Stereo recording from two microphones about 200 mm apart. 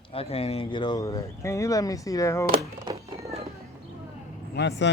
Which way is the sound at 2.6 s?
15° right (ahead or behind).